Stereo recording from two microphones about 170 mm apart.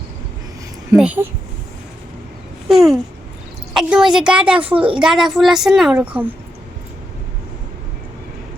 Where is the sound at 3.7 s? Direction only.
5° right (ahead or behind).